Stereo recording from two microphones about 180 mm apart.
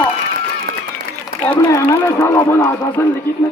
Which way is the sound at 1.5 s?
15° left (ahead or behind).